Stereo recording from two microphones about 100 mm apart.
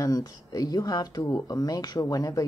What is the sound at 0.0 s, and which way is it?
Speech, 40° left (ahead or behind).